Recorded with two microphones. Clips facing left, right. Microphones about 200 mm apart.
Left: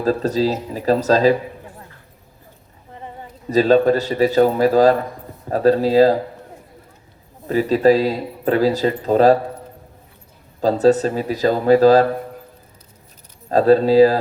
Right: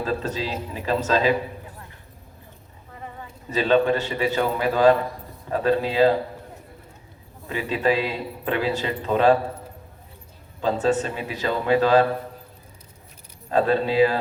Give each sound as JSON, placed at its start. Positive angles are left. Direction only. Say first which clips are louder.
{"t": 0.0, "sound": "a man's voice", "louder": "left 8 dB", "side_deg": 40}
{"t": 2.9, "sound": "a sound", "louder": "left 3 dB", "side_deg": 25}
{"t": 3.5, "sound": "a man's voice", "louder": "left 6 dB", "side_deg": 40}
{"t": 7.4, "sound": "a man's voice", "louder": "left 9 dB", "side_deg": 40}
{"t": 10.6, "sound": "a man's voice", "louder": "left 7 dB", "side_deg": 40}
{"t": 13.5, "sound": "a man's voice", "louder": "left 8 dB", "side_deg": 40}